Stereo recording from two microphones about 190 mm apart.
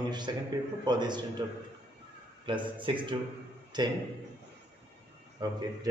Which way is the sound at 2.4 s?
25° right (ahead or behind).